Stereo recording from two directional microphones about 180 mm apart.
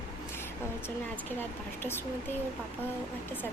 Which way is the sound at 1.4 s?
10° left (ahead or behind).